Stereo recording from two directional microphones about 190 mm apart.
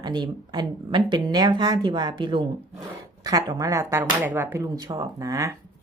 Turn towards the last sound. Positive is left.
turn(degrees=-15)  # may be behind; listen again after turning